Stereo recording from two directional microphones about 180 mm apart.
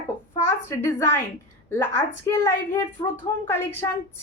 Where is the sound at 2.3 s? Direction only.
15° left (ahead or behind).